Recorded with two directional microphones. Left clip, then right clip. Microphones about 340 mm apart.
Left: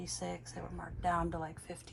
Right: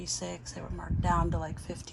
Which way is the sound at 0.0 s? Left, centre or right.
Centre.